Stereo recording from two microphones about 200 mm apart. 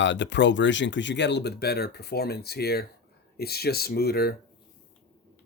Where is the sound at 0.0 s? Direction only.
65° left (ahead or behind).